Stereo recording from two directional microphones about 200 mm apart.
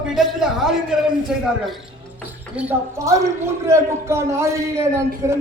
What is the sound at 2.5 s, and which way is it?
A man's voice, 15° right (ahead or behind).